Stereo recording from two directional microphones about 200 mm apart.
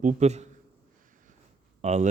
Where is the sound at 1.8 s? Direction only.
35° right (ahead or behind).